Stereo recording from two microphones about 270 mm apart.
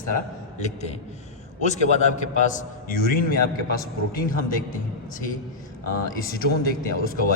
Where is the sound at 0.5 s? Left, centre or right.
Left.